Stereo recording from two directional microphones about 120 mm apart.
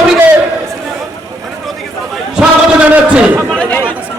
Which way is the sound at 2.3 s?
10° right (ahead or behind).